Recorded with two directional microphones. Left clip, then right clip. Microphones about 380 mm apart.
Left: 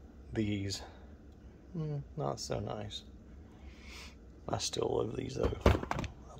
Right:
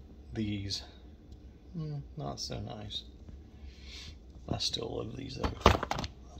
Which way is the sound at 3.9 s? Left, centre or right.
Centre.